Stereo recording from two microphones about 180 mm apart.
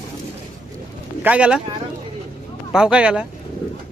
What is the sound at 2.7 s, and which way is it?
Speech, 5° right (ahead or behind).